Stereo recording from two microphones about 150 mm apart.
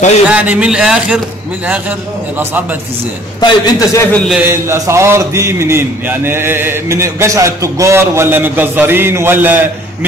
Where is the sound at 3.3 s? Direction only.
25° left (ahead or behind).